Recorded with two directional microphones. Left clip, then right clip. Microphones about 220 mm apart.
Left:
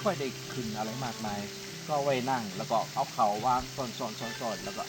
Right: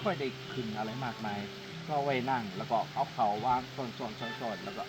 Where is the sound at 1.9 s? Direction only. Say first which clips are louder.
Left 2 dB; 15° left (ahead or behind).